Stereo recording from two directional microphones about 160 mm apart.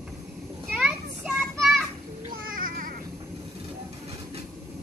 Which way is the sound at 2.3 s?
60° right (ahead or behind).